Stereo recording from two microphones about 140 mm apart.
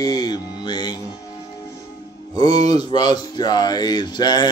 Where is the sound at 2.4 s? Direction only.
30° left (ahead or behind).